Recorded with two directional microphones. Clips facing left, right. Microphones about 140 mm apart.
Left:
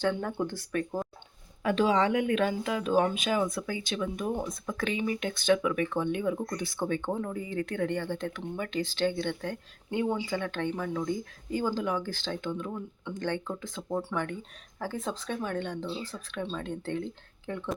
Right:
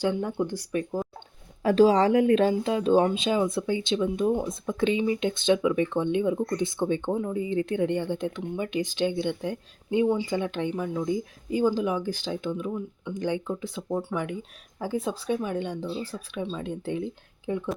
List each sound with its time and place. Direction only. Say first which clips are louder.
0.0 s speech: right 3 dB; 15° right (ahead or behind)
1.6 s speech: right 6 dB; 40° right (ahead or behind); by 17.6 s 15° right (ahead or behind)